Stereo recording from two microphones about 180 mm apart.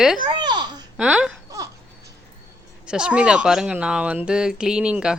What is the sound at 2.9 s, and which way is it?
Speech, 5° right (ahead or behind).